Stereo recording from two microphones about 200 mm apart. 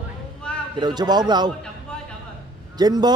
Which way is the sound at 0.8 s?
20° right (ahead or behind).